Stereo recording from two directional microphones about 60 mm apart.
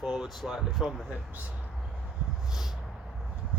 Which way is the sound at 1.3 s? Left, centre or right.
Right.